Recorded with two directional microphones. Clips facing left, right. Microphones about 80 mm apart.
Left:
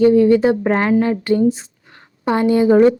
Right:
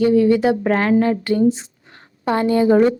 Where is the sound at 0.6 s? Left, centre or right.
Centre.